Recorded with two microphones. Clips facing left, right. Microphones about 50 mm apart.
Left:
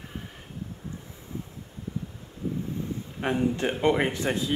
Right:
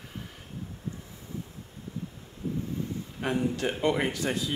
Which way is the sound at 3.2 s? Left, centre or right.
Left.